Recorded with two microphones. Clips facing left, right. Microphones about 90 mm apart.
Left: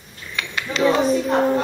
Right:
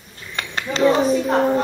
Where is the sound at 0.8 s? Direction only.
Centre (ahead or behind).